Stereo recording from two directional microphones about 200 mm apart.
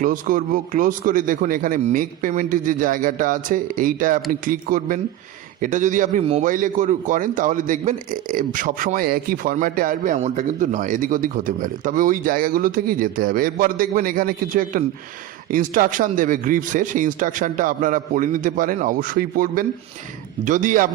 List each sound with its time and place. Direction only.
0.0 s a man's voice: 40° right (ahead or behind)